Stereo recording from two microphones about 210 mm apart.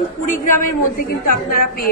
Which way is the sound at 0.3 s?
40° left (ahead or behind).